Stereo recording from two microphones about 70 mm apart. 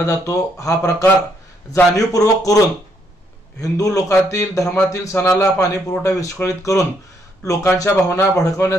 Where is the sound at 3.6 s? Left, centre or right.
Left.